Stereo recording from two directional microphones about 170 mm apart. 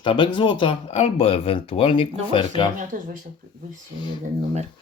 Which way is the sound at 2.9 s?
50° right (ahead or behind).